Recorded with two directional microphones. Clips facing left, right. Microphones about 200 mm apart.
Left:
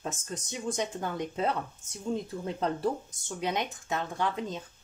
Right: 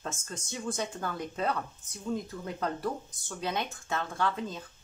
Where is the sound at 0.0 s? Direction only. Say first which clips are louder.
Left 2 dB; 15° left (ahead or behind).